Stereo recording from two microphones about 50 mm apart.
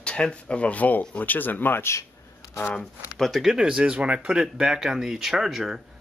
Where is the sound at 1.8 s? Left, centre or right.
Left.